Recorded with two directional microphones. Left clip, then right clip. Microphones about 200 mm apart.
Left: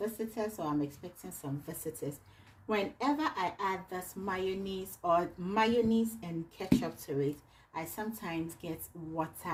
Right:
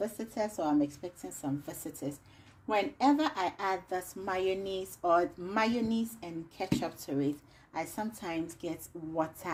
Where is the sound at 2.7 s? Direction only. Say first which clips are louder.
Right 4 dB; 45° right (ahead or behind).